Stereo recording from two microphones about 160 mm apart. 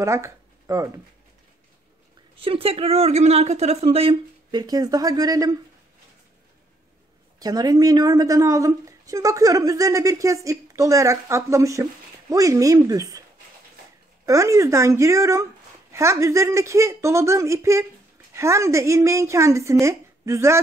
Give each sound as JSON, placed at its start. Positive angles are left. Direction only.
{"t": 0.0, "sound": "speech", "side_deg": -15}
{"t": 2.3, "sound": "speech", "side_deg": -35}
{"t": 7.3, "sound": "a woman's voice", "side_deg": -25}
{"t": 14.2, "sound": "a woman's voice", "side_deg": -20}